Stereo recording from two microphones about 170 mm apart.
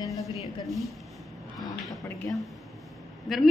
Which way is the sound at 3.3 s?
Centre (ahead or behind).